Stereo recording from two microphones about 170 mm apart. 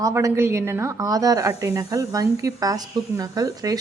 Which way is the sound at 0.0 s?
20° right (ahead or behind).